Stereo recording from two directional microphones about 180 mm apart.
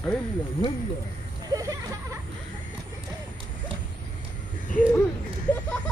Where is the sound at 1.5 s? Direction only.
20° right (ahead or behind).